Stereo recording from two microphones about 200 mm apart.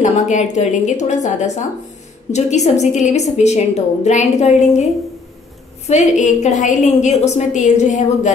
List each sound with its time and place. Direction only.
0.0 s a woman's voice: 35° left (ahead or behind)
5.9 s a woman's voice: 35° left (ahead or behind)